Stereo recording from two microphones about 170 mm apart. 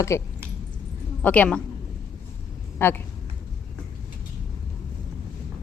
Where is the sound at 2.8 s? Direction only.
10° left (ahead or behind).